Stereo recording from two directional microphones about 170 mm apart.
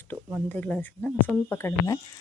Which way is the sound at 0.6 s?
10° left (ahead or behind).